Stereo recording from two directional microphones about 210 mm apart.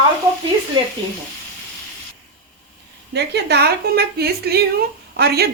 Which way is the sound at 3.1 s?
50° right (ahead or behind).